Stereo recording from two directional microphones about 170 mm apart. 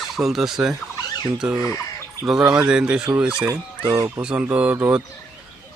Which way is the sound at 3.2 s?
5° right (ahead or behind).